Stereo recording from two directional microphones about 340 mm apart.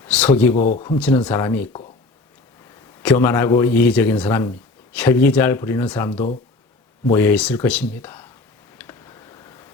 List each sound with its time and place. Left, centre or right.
0.0 s speech: centre
0.5 s speech: left
0.9 s a man's voice: centre
3.0 s a man's voice: centre
8.8 s tick: centre